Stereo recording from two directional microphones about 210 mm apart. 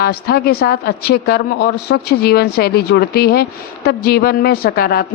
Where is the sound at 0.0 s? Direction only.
45° left (ahead or behind).